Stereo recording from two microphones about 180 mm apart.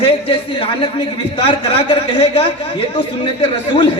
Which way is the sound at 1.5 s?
30° left (ahead or behind).